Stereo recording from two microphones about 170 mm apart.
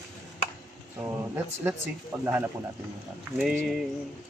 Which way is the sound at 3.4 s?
Centre (ahead or behind).